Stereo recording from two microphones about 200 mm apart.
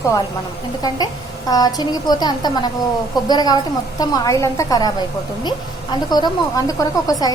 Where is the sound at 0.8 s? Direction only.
20° left (ahead or behind).